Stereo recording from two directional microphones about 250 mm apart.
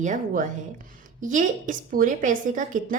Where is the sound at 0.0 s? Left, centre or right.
Right.